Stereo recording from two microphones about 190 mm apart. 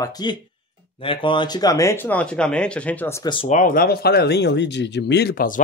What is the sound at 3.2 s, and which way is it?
Speech, 25° left (ahead or behind).